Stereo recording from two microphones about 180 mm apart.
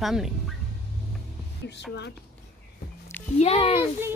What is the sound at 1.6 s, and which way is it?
Speech, 70° left (ahead or behind).